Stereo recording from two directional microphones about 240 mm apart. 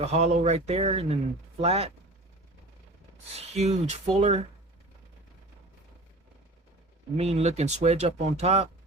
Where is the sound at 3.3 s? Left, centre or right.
Right.